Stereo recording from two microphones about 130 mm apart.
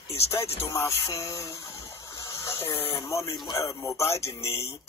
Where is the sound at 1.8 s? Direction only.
25° left (ahead or behind).